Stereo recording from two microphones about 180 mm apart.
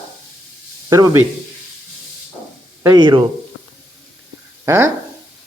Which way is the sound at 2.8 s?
20° right (ahead or behind).